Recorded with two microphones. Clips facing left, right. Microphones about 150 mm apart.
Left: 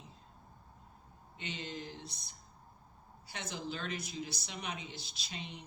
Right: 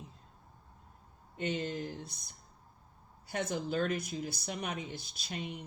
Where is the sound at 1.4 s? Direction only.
50° right (ahead or behind).